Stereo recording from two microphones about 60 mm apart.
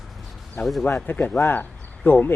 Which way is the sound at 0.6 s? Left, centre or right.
Centre.